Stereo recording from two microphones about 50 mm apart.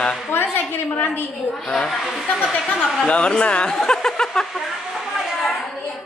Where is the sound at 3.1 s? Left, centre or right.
Left.